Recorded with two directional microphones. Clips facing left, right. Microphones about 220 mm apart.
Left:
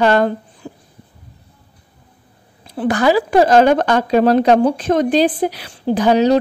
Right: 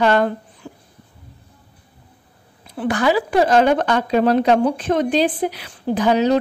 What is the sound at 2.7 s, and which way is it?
A woman's voice, 40° left (ahead or behind).